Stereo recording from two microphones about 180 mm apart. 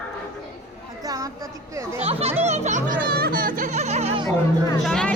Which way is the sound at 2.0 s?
35° right (ahead or behind).